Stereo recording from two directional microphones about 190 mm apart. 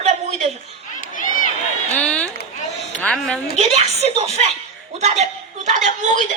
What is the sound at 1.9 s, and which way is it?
A woman's voice, 5° left (ahead or behind).